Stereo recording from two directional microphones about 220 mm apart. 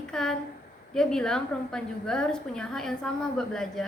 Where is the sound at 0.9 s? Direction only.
5° left (ahead or behind).